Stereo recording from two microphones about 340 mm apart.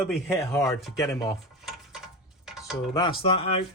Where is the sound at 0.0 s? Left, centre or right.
Centre.